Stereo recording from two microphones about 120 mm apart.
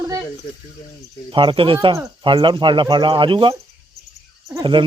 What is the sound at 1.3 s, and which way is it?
Speech, 45° right (ahead or behind).